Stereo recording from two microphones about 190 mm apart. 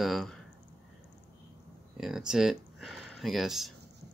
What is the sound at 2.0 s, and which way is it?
Speech, 5° right (ahead or behind).